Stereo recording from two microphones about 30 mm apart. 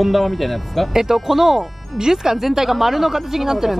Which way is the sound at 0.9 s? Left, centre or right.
Centre.